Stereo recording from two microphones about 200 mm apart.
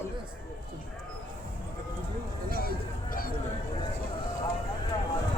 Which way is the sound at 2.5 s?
45° left (ahead or behind).